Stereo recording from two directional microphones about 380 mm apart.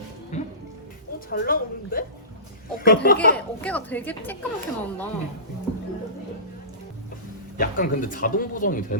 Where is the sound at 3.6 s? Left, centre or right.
Centre.